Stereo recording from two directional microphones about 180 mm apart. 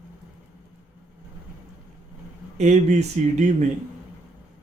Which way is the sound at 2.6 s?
40° right (ahead or behind).